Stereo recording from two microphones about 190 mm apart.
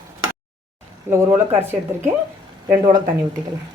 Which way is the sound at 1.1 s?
10° right (ahead or behind).